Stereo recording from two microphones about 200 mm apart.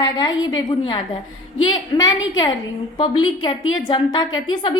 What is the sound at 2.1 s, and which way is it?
Speech, 75° left (ahead or behind).